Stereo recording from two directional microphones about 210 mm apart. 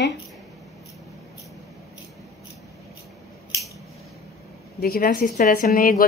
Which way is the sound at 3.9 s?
Centre (ahead or behind).